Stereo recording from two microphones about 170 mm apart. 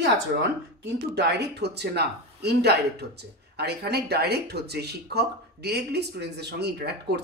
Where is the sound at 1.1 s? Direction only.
80° right.